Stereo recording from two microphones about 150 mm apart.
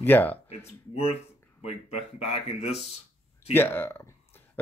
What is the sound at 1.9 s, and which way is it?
A man's voice, 45° left (ahead or behind).